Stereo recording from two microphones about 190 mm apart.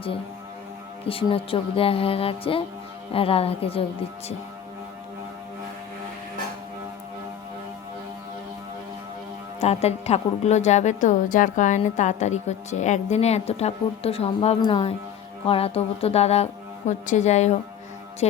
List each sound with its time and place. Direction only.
1.0 s speech: 30° left (ahead or behind)
9.6 s a woman's voice: 35° left (ahead or behind)